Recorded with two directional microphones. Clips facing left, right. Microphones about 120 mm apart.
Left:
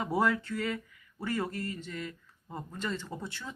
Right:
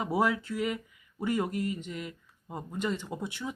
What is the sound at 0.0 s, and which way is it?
Speech, 10° right (ahead or behind).